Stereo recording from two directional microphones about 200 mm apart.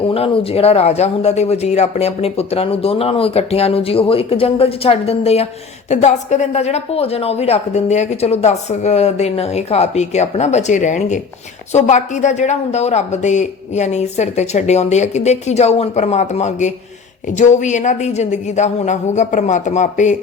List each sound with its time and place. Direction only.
0.0 s a woman's voice: 30° left (ahead or behind)